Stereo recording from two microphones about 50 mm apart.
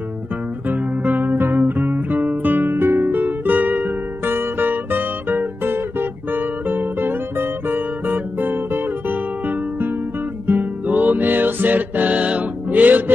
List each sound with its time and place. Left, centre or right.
0.7 s music: right
4.3 s music: right
5.9 s guitar: right
10.4 s music: right